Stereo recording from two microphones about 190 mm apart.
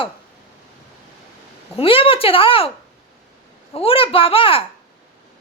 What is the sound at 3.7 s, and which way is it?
Speech, 30° left (ahead or behind).